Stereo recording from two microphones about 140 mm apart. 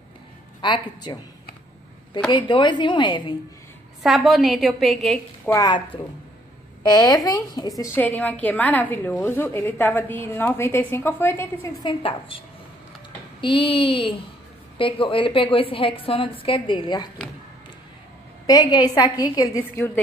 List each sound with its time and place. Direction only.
0.6 s a woman's voice: 35° left (ahead or behind)
2.1 s a woman's voice: 35° left (ahead or behind)
4.0 s a woman's voice: centre (ahead or behind)
5.4 s a woman's voice: 20° left (ahead or behind)
6.8 s a woman's voice: 30° left (ahead or behind)
11.8 s a woman's voice: 40° left (ahead or behind)
18.5 s a woman's voice: 30° left (ahead or behind)